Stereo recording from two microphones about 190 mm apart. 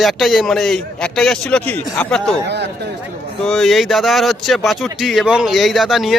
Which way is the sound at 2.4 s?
65° right (ahead or behind).